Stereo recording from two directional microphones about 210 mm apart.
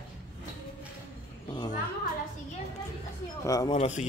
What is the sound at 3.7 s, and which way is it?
Speech, 30° left (ahead or behind).